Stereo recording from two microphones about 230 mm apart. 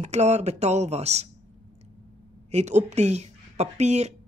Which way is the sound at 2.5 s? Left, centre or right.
Right.